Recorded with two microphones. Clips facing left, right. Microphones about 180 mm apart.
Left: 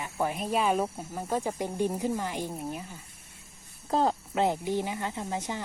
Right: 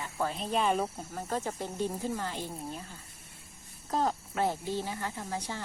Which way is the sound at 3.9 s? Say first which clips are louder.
Left 4 dB; 30° left (ahead or behind).